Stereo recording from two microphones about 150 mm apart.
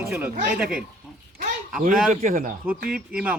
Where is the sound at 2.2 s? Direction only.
60° right (ahead or behind).